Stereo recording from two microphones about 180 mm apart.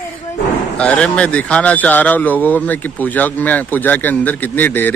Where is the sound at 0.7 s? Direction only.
5° left (ahead or behind).